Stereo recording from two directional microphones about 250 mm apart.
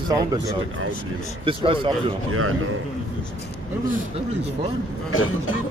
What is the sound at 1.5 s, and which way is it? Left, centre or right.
Speech, right.